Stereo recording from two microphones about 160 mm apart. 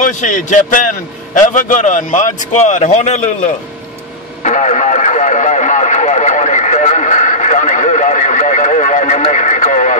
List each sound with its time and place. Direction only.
0.0 s a man's voice: 50° left (ahead or behind)
4.4 s vehicle: 45° left (ahead or behind)